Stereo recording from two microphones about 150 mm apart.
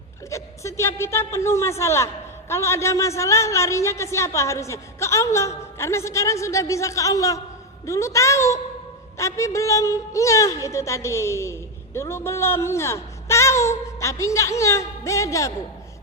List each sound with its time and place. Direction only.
0.3 s a woman's voice: 20° left (ahead or behind)